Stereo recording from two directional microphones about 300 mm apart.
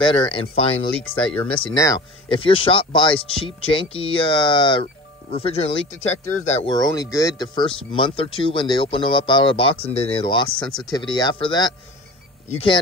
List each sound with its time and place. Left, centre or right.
0.3 s speech: centre